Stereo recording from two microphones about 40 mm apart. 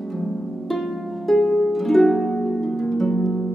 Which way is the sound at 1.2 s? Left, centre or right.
Centre.